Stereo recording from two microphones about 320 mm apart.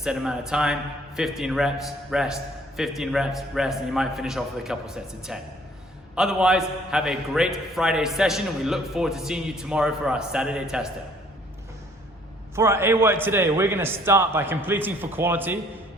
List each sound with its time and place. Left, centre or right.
0.0 s a man's voice: centre
12.5 s a man's voice: centre